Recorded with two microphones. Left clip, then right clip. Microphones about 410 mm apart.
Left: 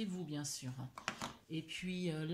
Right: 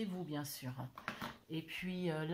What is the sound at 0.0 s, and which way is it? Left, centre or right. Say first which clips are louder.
Speech: right 1 dB; centre.